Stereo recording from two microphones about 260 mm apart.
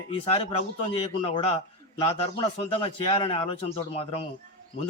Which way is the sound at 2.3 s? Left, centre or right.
Left.